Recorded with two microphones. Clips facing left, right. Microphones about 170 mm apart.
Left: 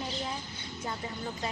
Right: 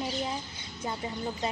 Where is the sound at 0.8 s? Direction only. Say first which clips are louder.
Right 4 dB; 20° right (ahead or behind).